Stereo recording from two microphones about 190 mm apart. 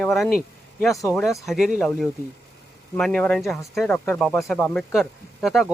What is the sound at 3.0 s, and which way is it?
Speech, 5° left (ahead or behind).